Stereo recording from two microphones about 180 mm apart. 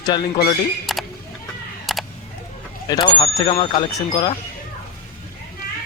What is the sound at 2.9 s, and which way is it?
Speech, 25° left (ahead or behind).